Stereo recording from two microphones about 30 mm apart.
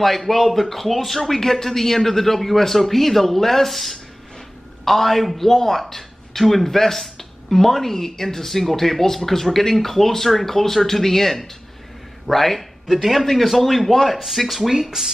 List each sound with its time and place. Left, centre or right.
0.0 s a woman's voice: centre
14.7 s speech: centre